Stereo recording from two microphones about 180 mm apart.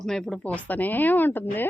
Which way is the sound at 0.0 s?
Centre (ahead or behind).